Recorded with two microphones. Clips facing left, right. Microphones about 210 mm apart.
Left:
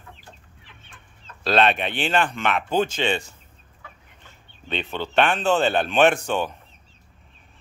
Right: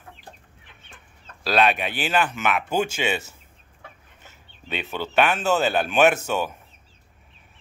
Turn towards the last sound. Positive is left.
turn(degrees=-5)  # may be behind; listen again after turning